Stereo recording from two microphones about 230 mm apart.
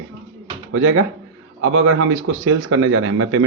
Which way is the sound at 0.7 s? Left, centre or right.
Right.